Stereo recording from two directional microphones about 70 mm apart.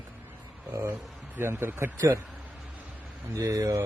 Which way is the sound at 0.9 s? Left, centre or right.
Right.